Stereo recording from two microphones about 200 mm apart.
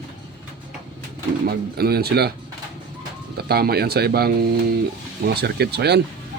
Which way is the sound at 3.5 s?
50° right (ahead or behind).